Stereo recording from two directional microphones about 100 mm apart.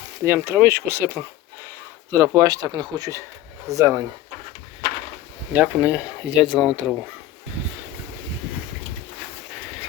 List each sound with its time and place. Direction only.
0.3 s speech: 20° right (ahead or behind); by 3.1 s 45° right (ahead or behind)
3.7 s speech: 30° right (ahead or behind)
5.5 s speech: 15° right (ahead or behind)